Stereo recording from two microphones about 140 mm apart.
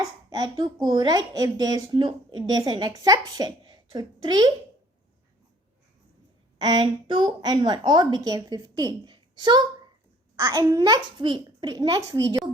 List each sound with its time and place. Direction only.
0.0 s speech: 25° right (ahead or behind)
6.6 s a woman's voice: 30° right (ahead or behind)